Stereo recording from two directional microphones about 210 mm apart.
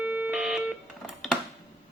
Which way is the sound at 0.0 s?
5° right (ahead or behind).